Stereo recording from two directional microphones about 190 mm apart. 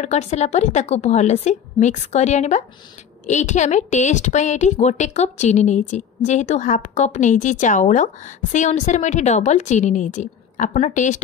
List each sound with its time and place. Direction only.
0.0 s a woman's voice: 35° left (ahead or behind)